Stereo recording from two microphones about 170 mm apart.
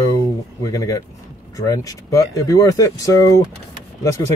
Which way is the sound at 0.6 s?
20° left (ahead or behind).